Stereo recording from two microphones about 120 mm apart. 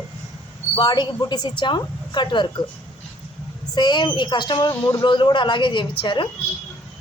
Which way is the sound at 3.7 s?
40° left (ahead or behind).